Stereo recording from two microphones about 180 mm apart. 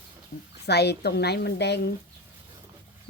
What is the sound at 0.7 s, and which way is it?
A woman's voice, 65° left (ahead or behind).